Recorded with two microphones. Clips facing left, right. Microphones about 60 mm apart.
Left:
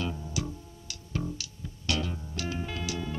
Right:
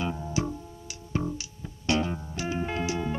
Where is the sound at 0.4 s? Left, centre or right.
Right.